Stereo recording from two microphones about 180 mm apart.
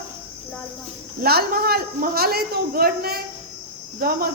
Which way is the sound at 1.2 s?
60° right (ahead or behind).